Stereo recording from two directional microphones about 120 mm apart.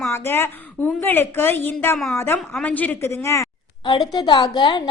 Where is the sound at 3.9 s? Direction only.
35° left (ahead or behind).